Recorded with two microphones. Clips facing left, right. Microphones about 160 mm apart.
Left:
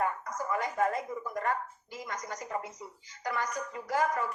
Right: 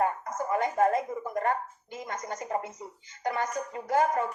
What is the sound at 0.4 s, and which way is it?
Speech, 30° right (ahead or behind).